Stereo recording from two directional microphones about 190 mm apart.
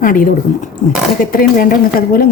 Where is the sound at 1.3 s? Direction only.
50° left (ahead or behind).